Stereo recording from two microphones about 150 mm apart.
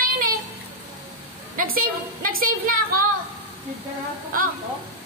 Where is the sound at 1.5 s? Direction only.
70° right (ahead or behind).